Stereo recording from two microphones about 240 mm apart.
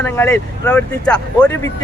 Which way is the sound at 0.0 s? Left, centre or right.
Centre.